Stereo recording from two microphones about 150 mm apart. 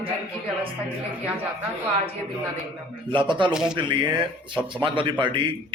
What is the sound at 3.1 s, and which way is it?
Speech, 30° right (ahead or behind).